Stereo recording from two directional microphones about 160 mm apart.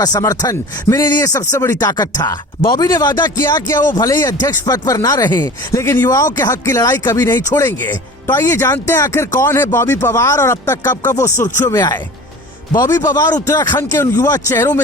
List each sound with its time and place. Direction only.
0.0 s speech: 25° left (ahead or behind)